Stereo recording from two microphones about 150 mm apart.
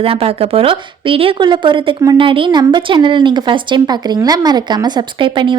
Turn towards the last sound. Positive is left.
turn(degrees=-30)  # may be behind; listen again after turning